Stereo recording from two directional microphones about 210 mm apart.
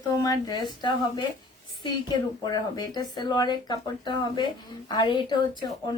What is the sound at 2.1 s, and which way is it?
Speech, 20° left (ahead or behind).